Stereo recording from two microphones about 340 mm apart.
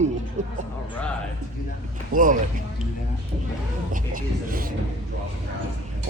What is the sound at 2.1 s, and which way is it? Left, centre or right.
Speech, right.